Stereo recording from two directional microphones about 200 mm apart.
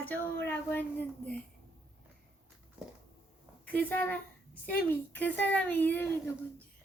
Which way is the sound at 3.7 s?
10° left (ahead or behind).